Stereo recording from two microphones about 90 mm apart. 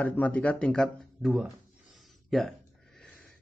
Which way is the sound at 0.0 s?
15° left (ahead or behind).